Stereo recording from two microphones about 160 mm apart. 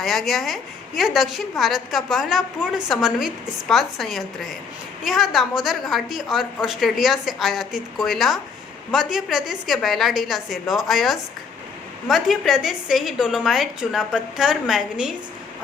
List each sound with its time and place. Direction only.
0.0 s a woman's voice: centre (ahead or behind)